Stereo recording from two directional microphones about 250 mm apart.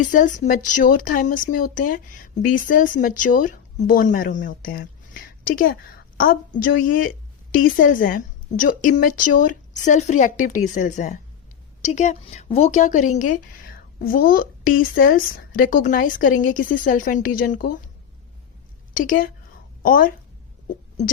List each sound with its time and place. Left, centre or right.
0.0 s a woman's voice: left
18.9 s speech: left